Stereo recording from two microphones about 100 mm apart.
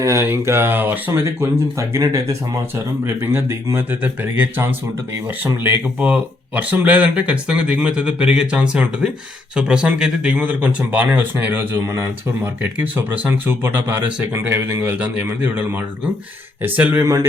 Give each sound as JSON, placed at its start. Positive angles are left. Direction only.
{"t": 0.0, "sound": "speech", "side_deg": -30}
{"t": 1.9, "sound": "speech", "side_deg": -35}
{"t": 12.8, "sound": "speech", "side_deg": -20}